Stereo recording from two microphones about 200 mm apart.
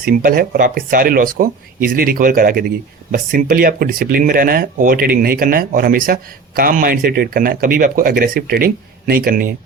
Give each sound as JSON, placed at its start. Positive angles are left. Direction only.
{"t": 0.0, "sound": "speech", "side_deg": -45}